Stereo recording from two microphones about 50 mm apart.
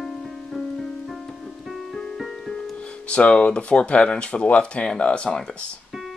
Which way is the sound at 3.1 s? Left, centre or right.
Left.